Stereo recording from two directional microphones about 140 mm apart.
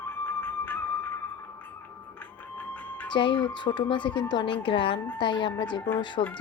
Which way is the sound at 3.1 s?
35° left (ahead or behind).